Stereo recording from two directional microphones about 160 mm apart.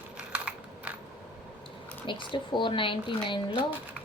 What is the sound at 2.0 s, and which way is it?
Speech, 30° left (ahead or behind).